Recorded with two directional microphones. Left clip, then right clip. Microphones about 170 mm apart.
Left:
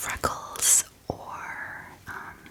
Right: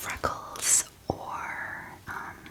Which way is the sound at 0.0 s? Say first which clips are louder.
Left 2 dB; 20° left (ahead or behind).